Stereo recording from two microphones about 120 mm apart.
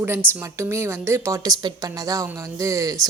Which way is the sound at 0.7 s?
25° right (ahead or behind).